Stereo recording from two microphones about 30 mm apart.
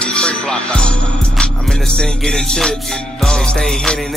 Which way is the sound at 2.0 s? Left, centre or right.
Left.